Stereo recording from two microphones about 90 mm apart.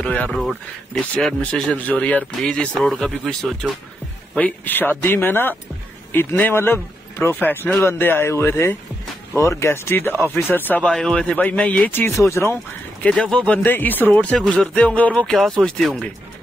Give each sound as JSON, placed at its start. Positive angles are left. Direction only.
{"t": 0.0, "sound": "speech", "side_deg": 15}
{"t": 1.4, "sound": "speech", "side_deg": 15}
{"t": 4.4, "sound": "speech", "side_deg": 20}
{"t": 10.8, "sound": "speech", "side_deg": 10}
{"t": 13.0, "sound": "speech", "side_deg": 5}
{"t": 13.7, "sound": "speech", "side_deg": 20}
{"t": 14.3, "sound": "speech", "side_deg": 5}
{"t": 15.2, "sound": "speech", "side_deg": 0}